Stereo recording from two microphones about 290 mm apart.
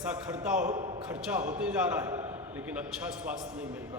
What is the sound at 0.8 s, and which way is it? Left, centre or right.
Speech, centre.